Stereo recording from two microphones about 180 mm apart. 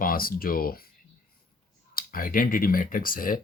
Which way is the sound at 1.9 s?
50° left (ahead or behind).